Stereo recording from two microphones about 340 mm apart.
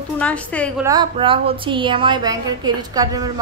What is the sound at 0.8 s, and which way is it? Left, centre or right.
A woman's voice, centre.